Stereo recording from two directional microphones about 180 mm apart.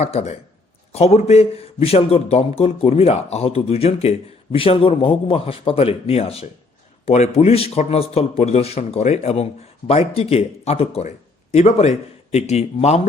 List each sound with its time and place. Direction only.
0.0 s a man's voice: 35° left (ahead or behind)